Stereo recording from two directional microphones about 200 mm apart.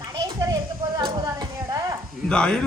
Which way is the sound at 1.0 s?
20° right (ahead or behind).